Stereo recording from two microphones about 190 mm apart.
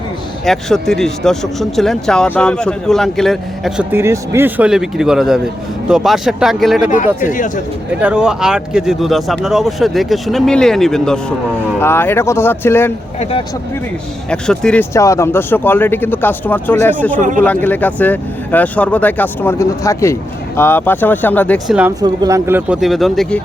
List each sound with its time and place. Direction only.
0.4 s speech: centre (ahead or behind)
3.9 s speech: 15° right (ahead or behind)
7.3 s speech: 40° left (ahead or behind)
8.0 s speech: 5° right (ahead or behind); by 12.9 s 10° left (ahead or behind)
14.3 s speech: 5° left (ahead or behind)
14.9 s speech: 15° left (ahead or behind)
17.2 s speech: 40° right (ahead or behind)
17.4 s speech: 10° left (ahead or behind)
21.7 s speech: 10° right (ahead or behind)
22.0 s speech: 20° right (ahead or behind); by 23.4 s centre (ahead or behind)